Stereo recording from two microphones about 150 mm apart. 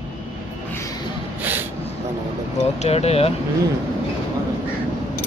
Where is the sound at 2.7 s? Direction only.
45° left (ahead or behind).